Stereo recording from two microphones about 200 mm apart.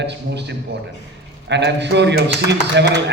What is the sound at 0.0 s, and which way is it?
A man's voice, 60° right (ahead or behind).